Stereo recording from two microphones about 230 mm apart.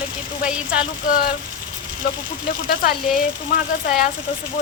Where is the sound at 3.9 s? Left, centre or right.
Left.